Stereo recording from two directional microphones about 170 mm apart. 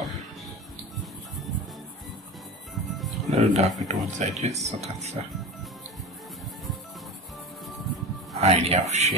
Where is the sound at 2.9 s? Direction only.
Centre (ahead or behind).